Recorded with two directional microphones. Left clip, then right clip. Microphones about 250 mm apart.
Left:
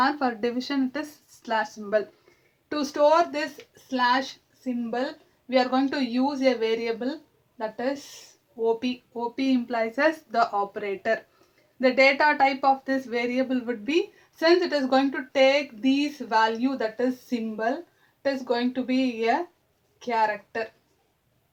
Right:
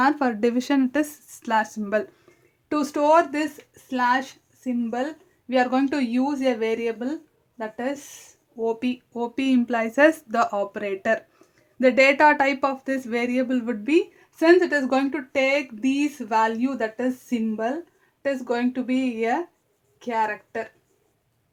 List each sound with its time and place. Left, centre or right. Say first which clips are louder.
0.0 s a woman's voice: right 3 dB; right